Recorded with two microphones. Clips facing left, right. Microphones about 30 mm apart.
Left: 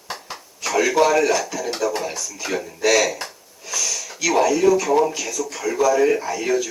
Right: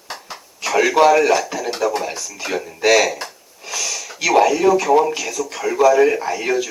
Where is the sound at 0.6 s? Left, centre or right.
Centre.